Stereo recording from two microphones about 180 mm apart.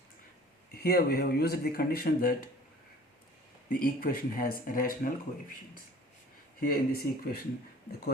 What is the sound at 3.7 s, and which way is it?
Speech, 55° left (ahead or behind).